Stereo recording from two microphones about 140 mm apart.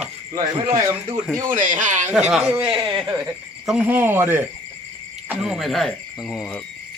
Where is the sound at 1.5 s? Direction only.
70° right (ahead or behind).